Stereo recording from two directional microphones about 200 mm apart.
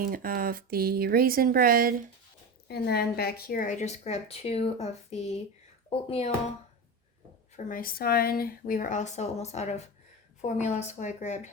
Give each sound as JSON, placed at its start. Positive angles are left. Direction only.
{"t": 0.0, "sound": "speech", "side_deg": -45}
{"t": 2.6, "sound": "speech", "side_deg": 55}
{"t": 7.5, "sound": "speech", "side_deg": 45}